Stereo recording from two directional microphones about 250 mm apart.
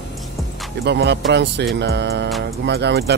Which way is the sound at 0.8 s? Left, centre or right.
Right.